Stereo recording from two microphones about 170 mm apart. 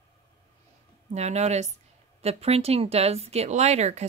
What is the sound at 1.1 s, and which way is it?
Speech, 40° right (ahead or behind).